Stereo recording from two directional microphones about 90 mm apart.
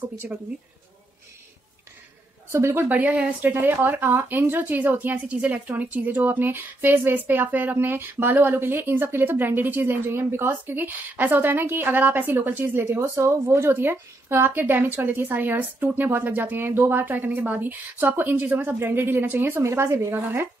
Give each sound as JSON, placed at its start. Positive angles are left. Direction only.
{"t": 2.5, "sound": "speech", "side_deg": -30}